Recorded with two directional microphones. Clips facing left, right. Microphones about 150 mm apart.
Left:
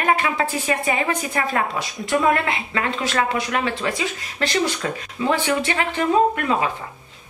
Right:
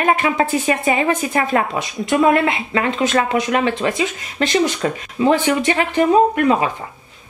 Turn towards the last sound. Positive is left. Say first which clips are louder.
# right 4 dB
turn(degrees=-15)  # may be behind; listen again after turning